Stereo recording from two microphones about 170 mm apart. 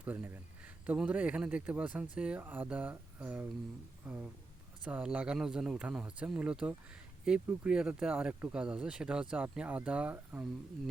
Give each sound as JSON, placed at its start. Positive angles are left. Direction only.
{"t": 0.0, "sound": "speech", "side_deg": -10}